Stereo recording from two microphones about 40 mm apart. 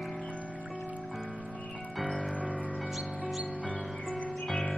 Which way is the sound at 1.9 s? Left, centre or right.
Centre.